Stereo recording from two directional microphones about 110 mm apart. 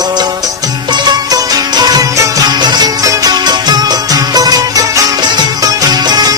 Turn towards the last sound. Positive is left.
turn(degrees=-40)  # may be behind; listen again after turning